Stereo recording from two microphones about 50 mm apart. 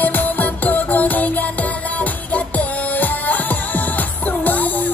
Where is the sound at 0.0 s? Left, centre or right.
Left.